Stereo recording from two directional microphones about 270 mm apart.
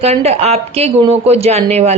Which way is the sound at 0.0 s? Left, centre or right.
Right.